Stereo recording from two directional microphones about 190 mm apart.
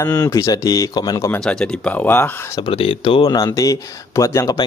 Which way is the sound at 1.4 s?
5° left (ahead or behind).